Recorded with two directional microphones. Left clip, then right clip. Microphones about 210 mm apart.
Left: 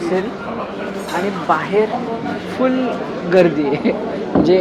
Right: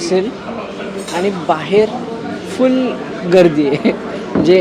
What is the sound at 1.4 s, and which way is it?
Speech, 50° right (ahead or behind).